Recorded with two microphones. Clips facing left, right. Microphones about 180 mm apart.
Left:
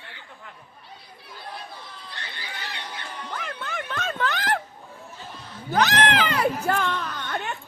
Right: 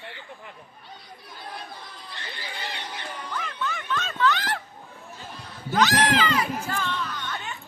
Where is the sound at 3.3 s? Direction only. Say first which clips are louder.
Right 2 dB; 55° left (ahead or behind).